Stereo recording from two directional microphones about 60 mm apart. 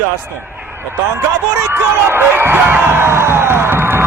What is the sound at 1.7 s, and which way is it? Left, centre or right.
Speech, right.